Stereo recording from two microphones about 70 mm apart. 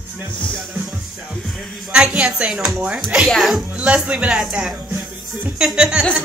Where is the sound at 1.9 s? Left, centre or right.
Centre.